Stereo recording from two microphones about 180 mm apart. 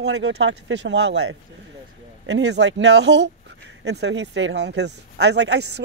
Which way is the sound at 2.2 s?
75° right (ahead or behind).